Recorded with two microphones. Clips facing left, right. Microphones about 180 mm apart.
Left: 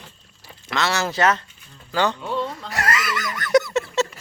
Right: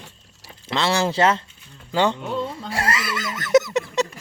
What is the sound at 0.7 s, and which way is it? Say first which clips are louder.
Speech: right 2 dB; 30° right (ahead or behind).